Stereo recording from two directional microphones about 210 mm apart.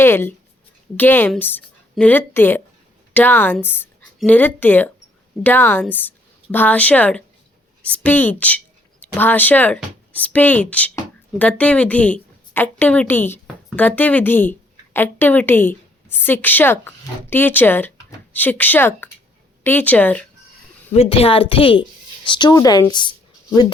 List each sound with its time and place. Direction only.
0.0 s a woman's voice: 10° left (ahead or behind)
20.9 s speech: 25° left (ahead or behind)